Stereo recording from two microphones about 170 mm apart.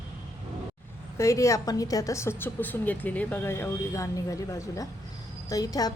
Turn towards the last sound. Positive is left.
turn(degrees=20)  # may be behind; listen again after turning